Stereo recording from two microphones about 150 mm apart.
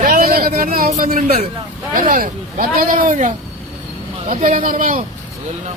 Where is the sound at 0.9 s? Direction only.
60° right (ahead or behind).